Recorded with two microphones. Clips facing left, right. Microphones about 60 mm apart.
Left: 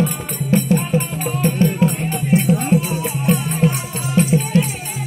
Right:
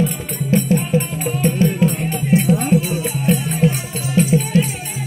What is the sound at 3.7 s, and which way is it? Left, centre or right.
Music, left.